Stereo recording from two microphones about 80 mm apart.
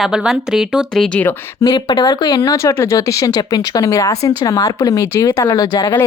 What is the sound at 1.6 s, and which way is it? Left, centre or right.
Speech, left.